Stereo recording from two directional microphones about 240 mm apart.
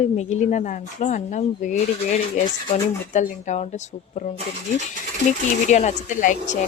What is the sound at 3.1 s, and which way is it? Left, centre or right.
Speech, left.